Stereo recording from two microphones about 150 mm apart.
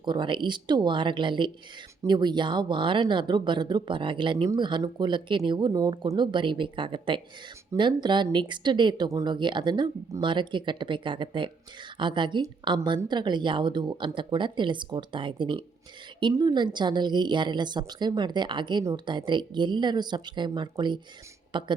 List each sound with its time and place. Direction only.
0.0 s speech: 30° right (ahead or behind)